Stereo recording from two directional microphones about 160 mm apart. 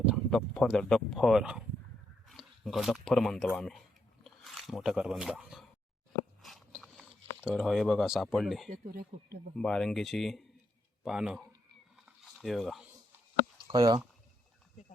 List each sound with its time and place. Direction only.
0.3 s speech: 5° left (ahead or behind)
4.2 s a sound: centre (ahead or behind)
8.7 s speech: 65° right (ahead or behind)
9.6 s speech: 5° left (ahead or behind)
12.0 s a sound: centre (ahead or behind)
13.7 s speech: 25° right (ahead or behind)